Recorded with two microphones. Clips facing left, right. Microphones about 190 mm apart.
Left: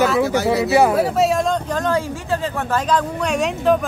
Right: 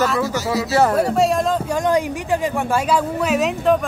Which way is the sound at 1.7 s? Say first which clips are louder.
Right 2 dB; 15° right (ahead or behind).